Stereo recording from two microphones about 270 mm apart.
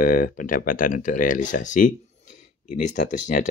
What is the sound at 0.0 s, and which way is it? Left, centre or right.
Speech, left.